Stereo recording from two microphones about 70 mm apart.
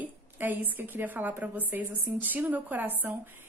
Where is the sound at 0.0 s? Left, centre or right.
Right.